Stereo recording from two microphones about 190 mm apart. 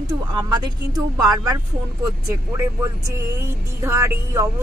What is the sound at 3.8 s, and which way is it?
Speech, 15° right (ahead or behind).